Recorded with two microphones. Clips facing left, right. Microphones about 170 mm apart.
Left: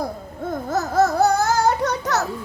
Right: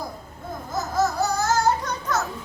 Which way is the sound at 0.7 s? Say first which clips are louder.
Left 5 dB; 65° left (ahead or behind).